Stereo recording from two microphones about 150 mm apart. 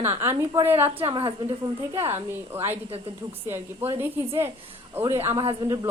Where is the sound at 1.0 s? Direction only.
40° right (ahead or behind).